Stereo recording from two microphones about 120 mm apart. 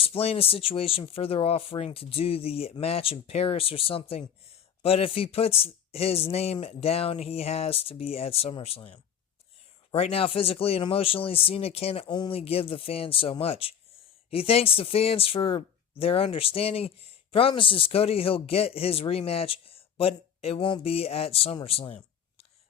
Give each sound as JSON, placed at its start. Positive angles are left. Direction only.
{"t": 0.0, "sound": "speech", "side_deg": 55}
{"t": 12.0, "sound": "speech", "side_deg": 35}
{"t": 12.3, "sound": "speech", "side_deg": 55}